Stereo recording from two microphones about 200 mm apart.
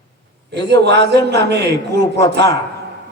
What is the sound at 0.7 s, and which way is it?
A man's voice, 60° right (ahead or behind).